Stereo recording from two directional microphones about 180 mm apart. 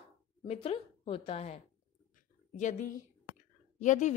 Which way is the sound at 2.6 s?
45° left (ahead or behind).